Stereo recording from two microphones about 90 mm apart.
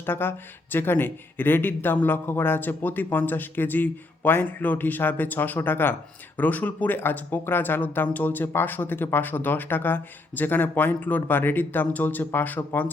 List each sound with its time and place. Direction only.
0.0 s speech: 25° left (ahead or behind)